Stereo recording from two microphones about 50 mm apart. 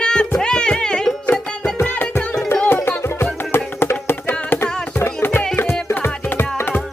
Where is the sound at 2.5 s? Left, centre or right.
Left.